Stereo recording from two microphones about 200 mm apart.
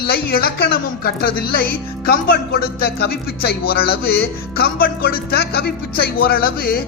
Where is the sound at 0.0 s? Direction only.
50° left (ahead or behind).